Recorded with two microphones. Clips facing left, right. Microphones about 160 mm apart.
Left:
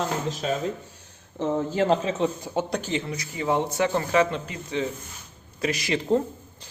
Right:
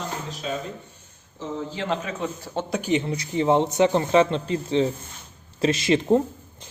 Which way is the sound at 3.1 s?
25° right (ahead or behind).